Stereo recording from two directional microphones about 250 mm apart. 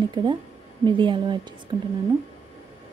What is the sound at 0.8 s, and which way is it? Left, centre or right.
Speech, centre.